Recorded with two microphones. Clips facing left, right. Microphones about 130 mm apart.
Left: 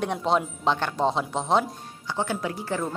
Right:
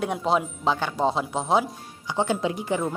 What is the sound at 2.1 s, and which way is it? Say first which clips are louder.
Speech: right 4 dB; 20° right (ahead or behind).